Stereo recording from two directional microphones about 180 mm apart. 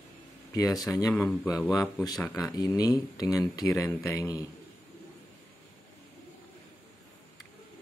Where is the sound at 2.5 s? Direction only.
20° left (ahead or behind).